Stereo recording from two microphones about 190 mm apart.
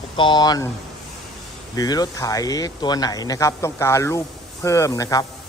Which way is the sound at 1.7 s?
20° left (ahead or behind).